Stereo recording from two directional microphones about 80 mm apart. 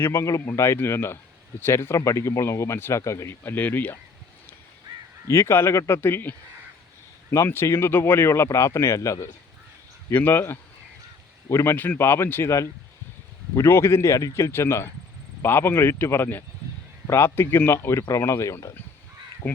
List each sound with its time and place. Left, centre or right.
0.0 s speech: left
5.3 s speech: left
7.3 s speech: left
10.1 s speech: left